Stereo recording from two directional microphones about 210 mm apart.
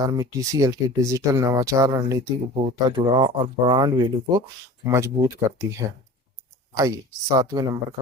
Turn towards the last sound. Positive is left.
turn(degrees=-15)  # may be behind; listen again after turning